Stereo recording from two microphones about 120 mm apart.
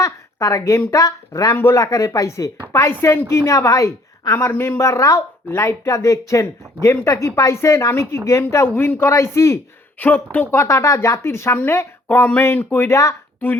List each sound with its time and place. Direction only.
0.0 s a woman's voice: 25° left (ahead or behind)